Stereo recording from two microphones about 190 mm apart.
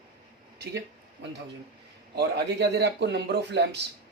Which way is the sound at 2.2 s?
65° right (ahead or behind).